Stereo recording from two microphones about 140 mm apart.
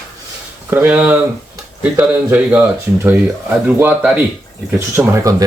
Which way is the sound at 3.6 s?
15° right (ahead or behind).